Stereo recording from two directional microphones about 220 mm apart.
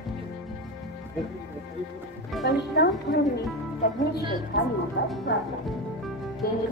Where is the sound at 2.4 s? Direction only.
50° left (ahead or behind).